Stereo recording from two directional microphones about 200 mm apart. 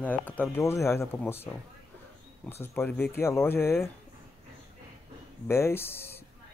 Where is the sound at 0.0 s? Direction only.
10° left (ahead or behind).